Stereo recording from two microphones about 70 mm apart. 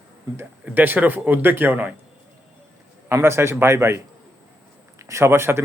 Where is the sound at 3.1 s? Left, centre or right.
Right.